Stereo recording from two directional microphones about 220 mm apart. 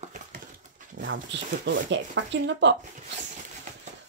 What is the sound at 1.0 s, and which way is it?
Speech, 55° right (ahead or behind).